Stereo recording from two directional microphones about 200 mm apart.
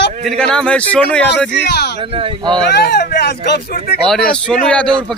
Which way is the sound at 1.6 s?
55° left (ahead or behind).